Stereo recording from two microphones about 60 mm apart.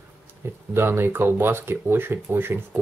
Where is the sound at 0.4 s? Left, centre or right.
Right.